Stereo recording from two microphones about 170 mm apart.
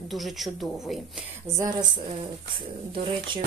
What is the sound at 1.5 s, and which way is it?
Speech, 20° right (ahead or behind).